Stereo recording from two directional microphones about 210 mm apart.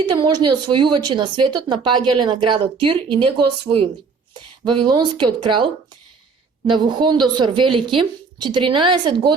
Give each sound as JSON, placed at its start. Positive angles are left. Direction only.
{"t": 0.3, "sound": "speech", "side_deg": -20}